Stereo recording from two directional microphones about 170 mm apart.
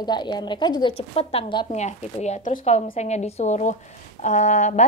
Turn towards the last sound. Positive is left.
turn(degrees=45)  # may be behind; listen again after turning